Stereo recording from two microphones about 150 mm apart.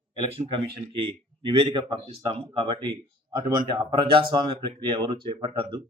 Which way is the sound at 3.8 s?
35° right (ahead or behind).